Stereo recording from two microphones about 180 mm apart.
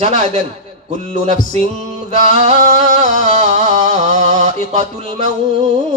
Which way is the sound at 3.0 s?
40° right (ahead or behind).